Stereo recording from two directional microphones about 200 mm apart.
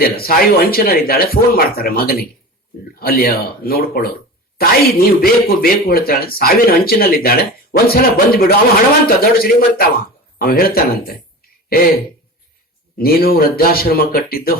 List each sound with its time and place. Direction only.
0.0 s speech: 50° left (ahead or behind)
13.0 s speech: 50° left (ahead or behind)